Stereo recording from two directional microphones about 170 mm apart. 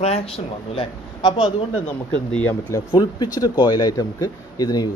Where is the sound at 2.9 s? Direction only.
25° left (ahead or behind).